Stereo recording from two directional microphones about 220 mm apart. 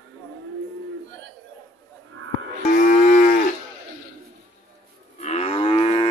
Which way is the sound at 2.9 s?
35° left (ahead or behind).